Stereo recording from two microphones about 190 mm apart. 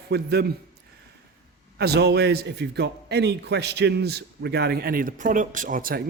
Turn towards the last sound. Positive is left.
turn(degrees=-45)  # may be behind; listen again after turning